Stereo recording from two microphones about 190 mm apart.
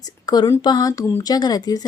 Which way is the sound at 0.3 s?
20° left (ahead or behind).